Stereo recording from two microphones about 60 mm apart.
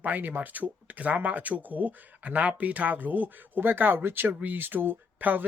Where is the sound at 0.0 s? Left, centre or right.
Right.